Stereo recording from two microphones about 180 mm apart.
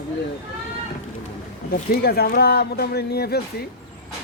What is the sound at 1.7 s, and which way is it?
A man's voice, 55° left (ahead or behind).